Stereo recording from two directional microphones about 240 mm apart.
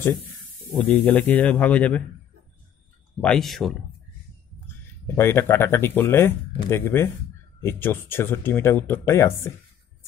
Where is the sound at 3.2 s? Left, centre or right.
Centre.